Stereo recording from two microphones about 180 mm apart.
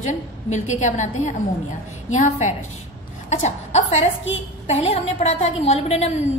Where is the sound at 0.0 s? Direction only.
40° left (ahead or behind).